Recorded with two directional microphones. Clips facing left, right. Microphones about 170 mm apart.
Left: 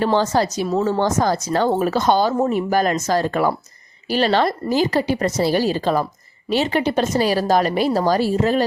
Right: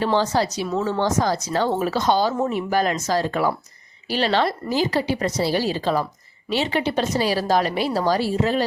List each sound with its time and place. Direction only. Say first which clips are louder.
0.0 s a woman's voice: left 2 dB; 45° left (ahead or behind)